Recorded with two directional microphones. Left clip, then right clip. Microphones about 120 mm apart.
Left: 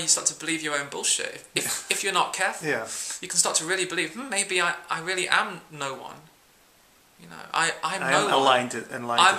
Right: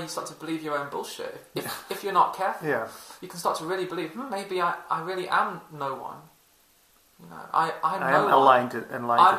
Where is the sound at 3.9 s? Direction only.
35° left (ahead or behind).